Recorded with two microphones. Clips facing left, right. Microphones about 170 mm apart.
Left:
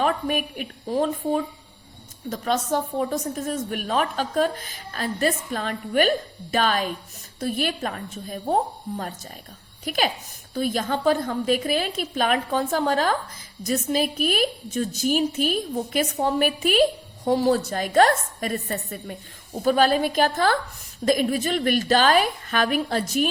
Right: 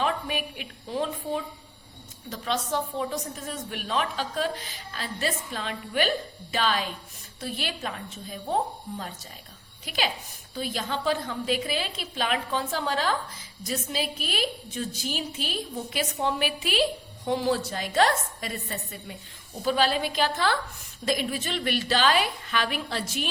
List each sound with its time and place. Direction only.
0.0 s a woman's voice: 50° left (ahead or behind)